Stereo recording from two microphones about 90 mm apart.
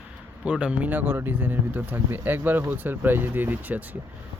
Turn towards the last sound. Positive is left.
turn(degrees=-20)  # may be behind; listen again after turning